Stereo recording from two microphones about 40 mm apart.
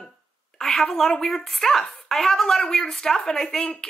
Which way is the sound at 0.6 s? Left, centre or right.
Centre.